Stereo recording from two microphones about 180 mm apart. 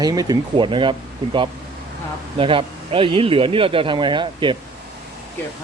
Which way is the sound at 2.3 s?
30° right (ahead or behind).